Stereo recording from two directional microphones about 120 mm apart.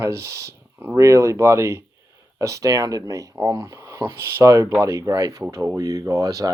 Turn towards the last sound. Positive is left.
turn(degrees=-30)  # may be behind; listen again after turning